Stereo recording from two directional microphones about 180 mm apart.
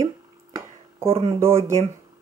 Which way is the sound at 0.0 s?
15° right (ahead or behind).